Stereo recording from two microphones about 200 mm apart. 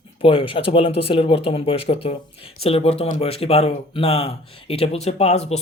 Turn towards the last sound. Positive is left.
turn(degrees=30)  # may be behind; listen again after turning